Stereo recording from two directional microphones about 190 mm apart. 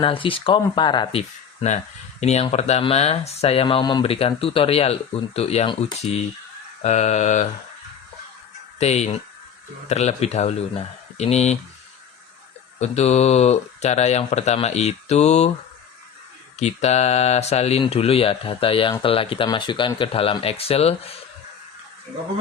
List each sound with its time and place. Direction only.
0.0 s speech: 25° left (ahead or behind)
2.2 s speech: 35° left (ahead or behind)
8.8 s speech: 35° left (ahead or behind)
12.8 s speech: 35° left (ahead or behind)
16.6 s speech: 35° left (ahead or behind)